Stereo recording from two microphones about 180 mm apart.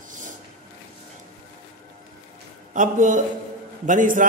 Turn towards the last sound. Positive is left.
turn(degrees=-45)  # may be behind; listen again after turning